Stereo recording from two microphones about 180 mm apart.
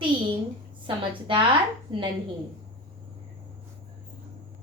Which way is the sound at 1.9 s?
30° right (ahead or behind).